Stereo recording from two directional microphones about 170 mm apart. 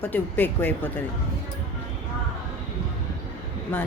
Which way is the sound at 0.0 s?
10° left (ahead or behind).